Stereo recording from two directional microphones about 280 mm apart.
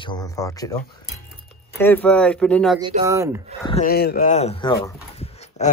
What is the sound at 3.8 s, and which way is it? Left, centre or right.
Speech, left.